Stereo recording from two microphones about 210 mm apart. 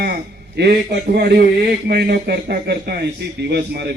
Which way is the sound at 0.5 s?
50° right (ahead or behind).